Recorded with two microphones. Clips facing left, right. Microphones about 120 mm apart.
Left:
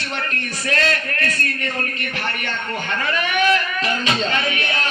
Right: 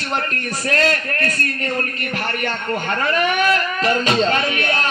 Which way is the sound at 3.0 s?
40° right (ahead or behind).